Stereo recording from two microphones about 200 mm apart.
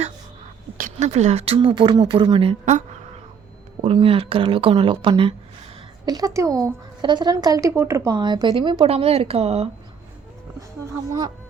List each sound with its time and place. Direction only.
0.8 s speech: 40° right (ahead or behind)